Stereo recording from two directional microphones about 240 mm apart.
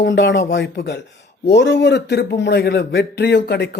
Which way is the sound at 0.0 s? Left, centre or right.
Left.